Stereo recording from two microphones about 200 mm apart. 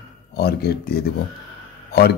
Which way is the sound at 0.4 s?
50° left (ahead or behind).